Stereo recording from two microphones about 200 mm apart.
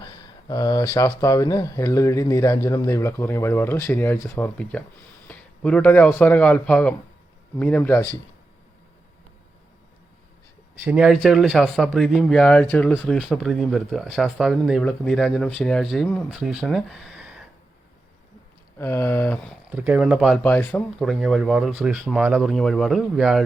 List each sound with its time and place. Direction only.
0.0 s a man's voice: 20° left (ahead or behind)
10.8 s speech: 5° right (ahead or behind)
18.8 s speech: 10° left (ahead or behind)
19.7 s speech: 10° right (ahead or behind)
20.4 s speech: 10° left (ahead or behind)